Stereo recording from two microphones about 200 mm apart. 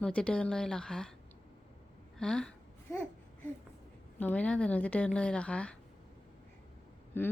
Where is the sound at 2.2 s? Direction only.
5° left (ahead or behind).